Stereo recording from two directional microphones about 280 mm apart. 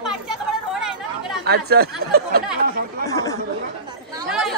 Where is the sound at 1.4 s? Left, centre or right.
Right.